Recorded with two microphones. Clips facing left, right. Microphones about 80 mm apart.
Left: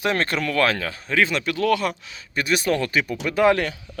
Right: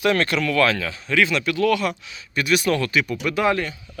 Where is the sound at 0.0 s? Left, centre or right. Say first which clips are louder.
Right 3 dB; left.